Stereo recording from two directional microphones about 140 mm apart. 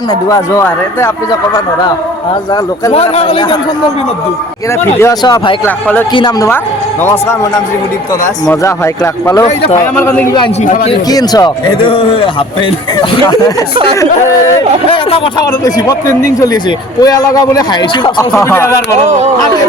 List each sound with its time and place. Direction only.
0.1 s speech: 25° left (ahead or behind)
2.9 s speech: 45° left (ahead or behind)
5.2 s a man's voice: 30° left (ahead or behind)
5.6 s speech: 15° left (ahead or behind)
8.4 s speech: 20° left (ahead or behind)
10.6 s a man's voice: 75° left (ahead or behind)
11.1 s a man's voice: 25° left (ahead or behind)
13.9 s speech: 20° left (ahead or behind)
14.8 s a man's voice: 40° left (ahead or behind)
15.6 s speech: 25° left (ahead or behind)
18.3 s speech: 20° left (ahead or behind)